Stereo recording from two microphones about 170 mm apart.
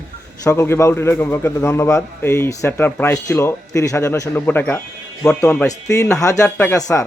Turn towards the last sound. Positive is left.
turn(degrees=20)  # may be behind; listen again after turning